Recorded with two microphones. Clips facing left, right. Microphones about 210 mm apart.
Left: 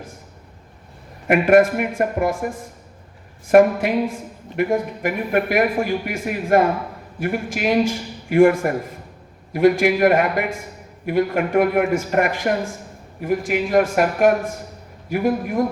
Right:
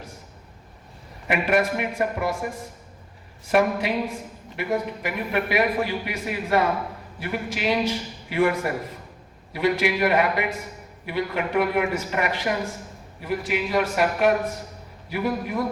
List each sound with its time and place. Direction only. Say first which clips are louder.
1.3 s a man's voice: left 8 dB; 50° left (ahead or behind)